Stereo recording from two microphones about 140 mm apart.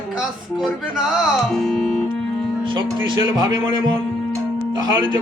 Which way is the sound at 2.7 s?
35° right (ahead or behind).